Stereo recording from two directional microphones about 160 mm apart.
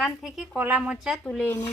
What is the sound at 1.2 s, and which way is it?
Speech, 10° left (ahead or behind).